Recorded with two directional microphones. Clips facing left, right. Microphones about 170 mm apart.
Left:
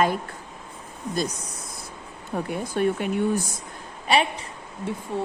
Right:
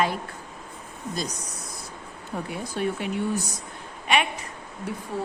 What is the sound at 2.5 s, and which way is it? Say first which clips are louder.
A woman's voice: left 5 dB; 50° left (ahead or behind).